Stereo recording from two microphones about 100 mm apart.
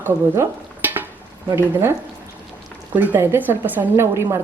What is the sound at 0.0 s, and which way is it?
Stir, 20° right (ahead or behind).